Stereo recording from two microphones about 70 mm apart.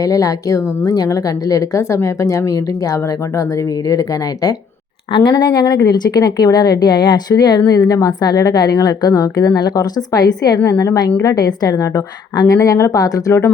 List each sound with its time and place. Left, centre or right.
0.0 s speech: left
5.2 s a woman's voice: left
7.7 s a woman's voice: left
10.6 s speech: left
12.5 s speech: left